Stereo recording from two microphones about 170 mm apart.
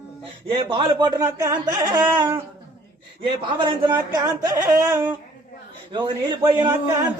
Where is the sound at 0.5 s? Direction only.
30° right (ahead or behind).